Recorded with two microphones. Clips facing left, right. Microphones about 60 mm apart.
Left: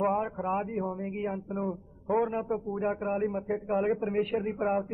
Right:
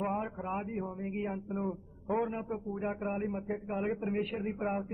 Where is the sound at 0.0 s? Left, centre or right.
Centre.